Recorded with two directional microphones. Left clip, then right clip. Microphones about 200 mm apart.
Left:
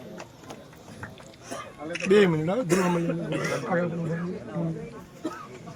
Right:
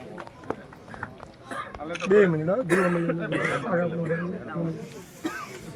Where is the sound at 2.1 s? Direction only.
70° left (ahead or behind).